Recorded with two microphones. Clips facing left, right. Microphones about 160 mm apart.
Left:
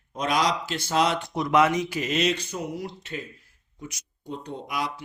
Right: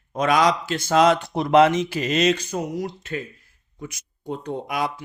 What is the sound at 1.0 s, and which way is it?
Speech, 40° right (ahead or behind).